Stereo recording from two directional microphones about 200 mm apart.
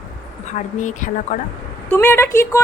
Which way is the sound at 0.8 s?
40° left (ahead or behind).